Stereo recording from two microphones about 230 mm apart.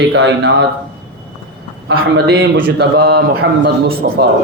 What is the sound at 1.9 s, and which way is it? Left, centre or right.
A man's voice, right.